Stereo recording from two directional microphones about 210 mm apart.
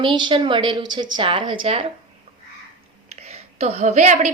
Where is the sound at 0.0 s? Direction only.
20° right (ahead or behind).